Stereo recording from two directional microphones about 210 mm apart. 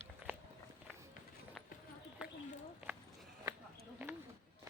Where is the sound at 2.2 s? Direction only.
5° right (ahead or behind).